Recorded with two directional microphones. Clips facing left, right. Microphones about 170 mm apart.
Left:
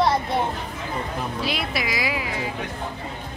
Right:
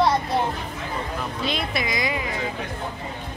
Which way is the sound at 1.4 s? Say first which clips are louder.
Right 2 dB; 5° left (ahead or behind).